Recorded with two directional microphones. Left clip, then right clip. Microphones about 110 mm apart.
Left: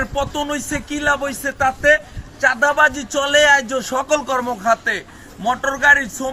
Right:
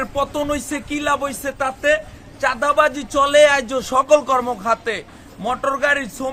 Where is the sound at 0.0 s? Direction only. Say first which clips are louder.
Even; 35° right (ahead or behind).